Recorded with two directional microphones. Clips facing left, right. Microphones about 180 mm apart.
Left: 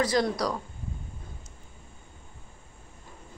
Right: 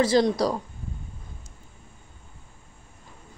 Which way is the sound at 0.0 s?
25° right (ahead or behind).